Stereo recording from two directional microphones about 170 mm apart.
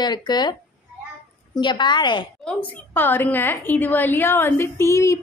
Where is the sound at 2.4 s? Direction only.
10° left (ahead or behind).